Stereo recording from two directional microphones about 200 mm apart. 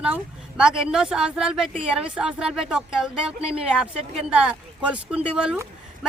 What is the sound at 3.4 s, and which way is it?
Speech, 30° right (ahead or behind).